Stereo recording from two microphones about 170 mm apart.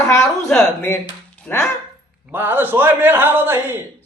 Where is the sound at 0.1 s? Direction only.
20° left (ahead or behind).